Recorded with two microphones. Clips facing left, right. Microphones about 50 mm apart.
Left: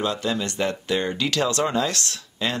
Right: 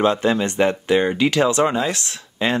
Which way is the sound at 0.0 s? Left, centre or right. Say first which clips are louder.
Right 7 dB; right.